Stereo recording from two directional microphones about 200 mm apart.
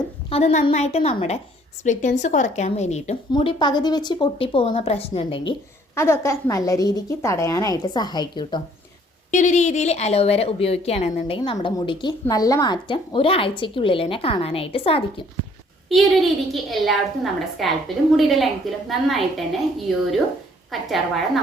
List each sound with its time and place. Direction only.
0.3 s a woman's voice: 30° left (ahead or behind)
5.9 s a woman's voice: 15° left (ahead or behind)
9.3 s a woman's voice: 35° left (ahead or behind)
15.9 s a woman's voice: centre (ahead or behind)
20.7 s a woman's voice: centre (ahead or behind)